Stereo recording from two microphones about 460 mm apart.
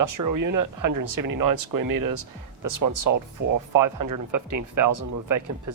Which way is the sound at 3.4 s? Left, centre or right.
Right.